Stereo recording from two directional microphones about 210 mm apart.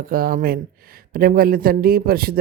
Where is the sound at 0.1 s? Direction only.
45° right (ahead or behind).